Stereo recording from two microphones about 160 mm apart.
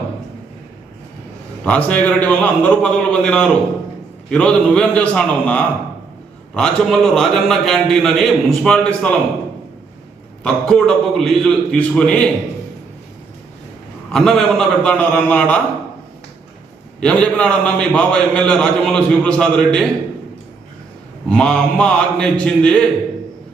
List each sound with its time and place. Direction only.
1.6 s a man's voice: 10° left (ahead or behind)
10.4 s a man's voice: 5° left (ahead or behind)
14.1 s a man's voice: 5° left (ahead or behind)
17.0 s a man's voice: 5° left (ahead or behind)
21.2 s a man's voice: 5° left (ahead or behind)